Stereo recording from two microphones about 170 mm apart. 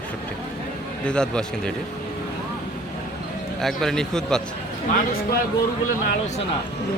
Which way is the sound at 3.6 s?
Centre (ahead or behind).